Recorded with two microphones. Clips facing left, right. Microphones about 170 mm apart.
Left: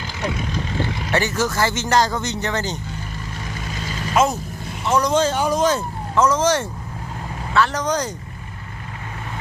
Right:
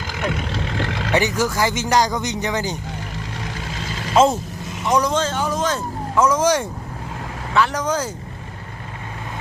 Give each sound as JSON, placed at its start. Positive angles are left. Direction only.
{"t": 0.1, "sound": "vehicle", "side_deg": -55}
{"t": 0.4, "sound": "vehicle", "side_deg": -80}
{"t": 1.1, "sound": "speech", "side_deg": -15}
{"t": 4.1, "sound": "speech", "side_deg": -25}
{"t": 4.9, "sound": "speech", "side_deg": -10}
{"t": 5.1, "sound": "speech", "side_deg": 10}
{"t": 6.1, "sound": "speech", "side_deg": -10}